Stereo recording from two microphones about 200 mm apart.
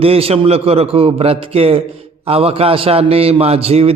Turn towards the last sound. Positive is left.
turn(degrees=-30)  # may be behind; listen again after turning